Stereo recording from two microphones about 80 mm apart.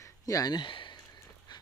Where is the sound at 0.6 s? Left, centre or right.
Left.